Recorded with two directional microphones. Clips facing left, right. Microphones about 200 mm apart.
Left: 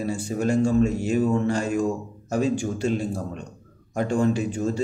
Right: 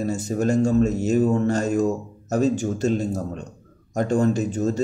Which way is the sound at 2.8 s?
40° right (ahead or behind).